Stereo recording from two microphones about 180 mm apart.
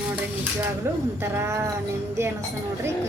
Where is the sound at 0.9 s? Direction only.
15° right (ahead or behind).